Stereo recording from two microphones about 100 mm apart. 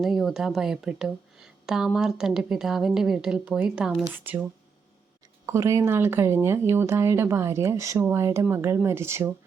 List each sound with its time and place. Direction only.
0.0 s a woman's voice: centre (ahead or behind)
5.5 s speech: 30° right (ahead or behind)